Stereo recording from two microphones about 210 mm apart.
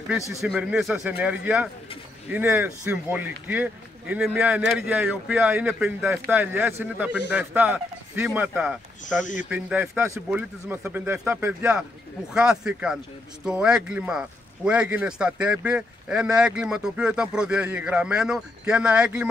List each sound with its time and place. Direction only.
0.3 s a man's voice: centre (ahead or behind)
9.0 s speech: 35° left (ahead or behind)
9.5 s a man's voice: 5° right (ahead or behind)